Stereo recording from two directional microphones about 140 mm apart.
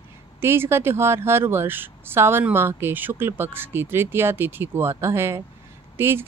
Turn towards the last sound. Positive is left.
turn(degrees=-15)  # may be behind; listen again after turning